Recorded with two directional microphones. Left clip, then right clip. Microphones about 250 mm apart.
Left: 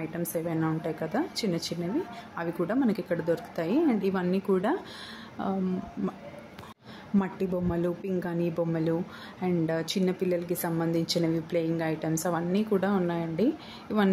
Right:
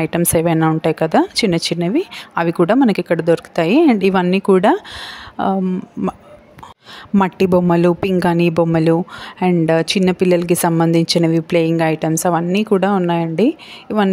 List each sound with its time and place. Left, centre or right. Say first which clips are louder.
0.0 s speech: right 16 dB; right
7.2 s speech: right 16 dB; right